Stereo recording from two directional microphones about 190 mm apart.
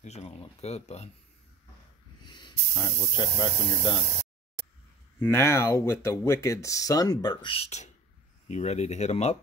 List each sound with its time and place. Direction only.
0.0 s speech: 35° left (ahead or behind)
2.2 s snake: 25° left (ahead or behind)
2.7 s speech: 15° left (ahead or behind)
5.2 s speech: 15° left (ahead or behind); by 9.4 s 35° left (ahead or behind)